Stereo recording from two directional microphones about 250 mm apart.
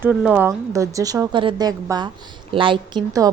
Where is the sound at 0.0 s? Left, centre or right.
Centre.